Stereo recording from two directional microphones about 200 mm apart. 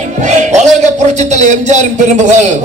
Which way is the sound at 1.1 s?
35° right (ahead or behind).